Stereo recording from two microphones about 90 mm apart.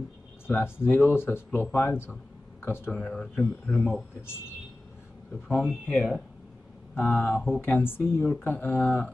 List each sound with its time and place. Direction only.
0.5 s speech: 25° left (ahead or behind)
2.9 s speech: 10° left (ahead or behind)
5.7 s speech: 15° left (ahead or behind)